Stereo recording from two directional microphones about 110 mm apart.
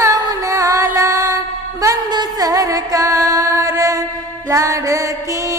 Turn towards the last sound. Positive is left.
turn(degrees=-30)  # may be behind; listen again after turning